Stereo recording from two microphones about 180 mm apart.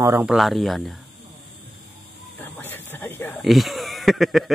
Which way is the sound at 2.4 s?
10° left (ahead or behind).